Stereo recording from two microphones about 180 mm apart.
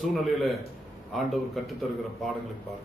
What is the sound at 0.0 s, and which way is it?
A man's voice, centre (ahead or behind).